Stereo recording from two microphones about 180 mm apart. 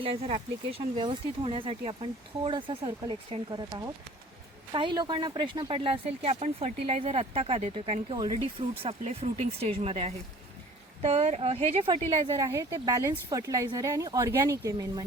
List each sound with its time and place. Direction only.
0.0 s speech: 35° right (ahead or behind)
8.8 s speech: 35° right (ahead or behind)
12.3 s speech: 15° right (ahead or behind)